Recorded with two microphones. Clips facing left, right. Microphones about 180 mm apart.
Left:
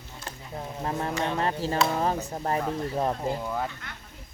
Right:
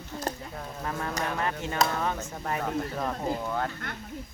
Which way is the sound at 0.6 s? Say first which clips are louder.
Left 3 dB; 25° left (ahead or behind).